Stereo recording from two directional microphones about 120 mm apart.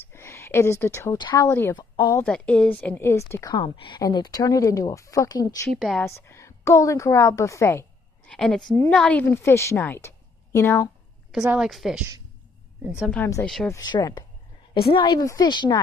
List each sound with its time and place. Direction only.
0.1 s a sound: 20° left (ahead or behind)
1.1 s speech: 40° left (ahead or behind)
1.4 s a woman's voice: 20° left (ahead or behind)
1.8 s speech: 40° left (ahead or behind)
2.2 s speech: 10° left (ahead or behind)
3.5 s speech: 40° left (ahead or behind)
5.7 s a woman's voice: 5° left (ahead or behind)
6.0 s a woman's voice: 20° left (ahead or behind)
8.3 s a woman's voice: 5° left (ahead or behind)
11.3 s a woman's voice: 5° right (ahead or behind)
13.7 s speech: 35° left (ahead or behind)
14.7 s a woman's voice: 45° left (ahead or behind)
15.0 s speech: 35° left (ahead or behind)